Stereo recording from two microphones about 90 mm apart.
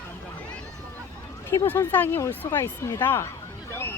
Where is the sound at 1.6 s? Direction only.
20° left (ahead or behind).